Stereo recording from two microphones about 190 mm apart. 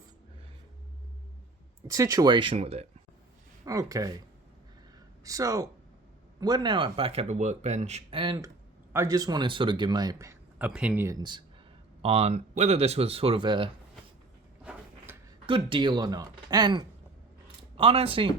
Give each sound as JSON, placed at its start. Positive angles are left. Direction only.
{"t": 1.9, "sound": "speech", "side_deg": -15}
{"t": 3.7, "sound": "speech", "side_deg": -20}
{"t": 5.2, "sound": "speech", "side_deg": -20}
{"t": 8.9, "sound": "speech", "side_deg": -15}
{"t": 12.0, "sound": "speech", "side_deg": -35}
{"t": 14.6, "sound": "a sound", "side_deg": -5}
{"t": 15.4, "sound": "speech", "side_deg": -25}